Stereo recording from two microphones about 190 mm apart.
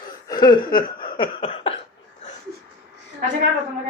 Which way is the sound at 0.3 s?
20° left (ahead or behind).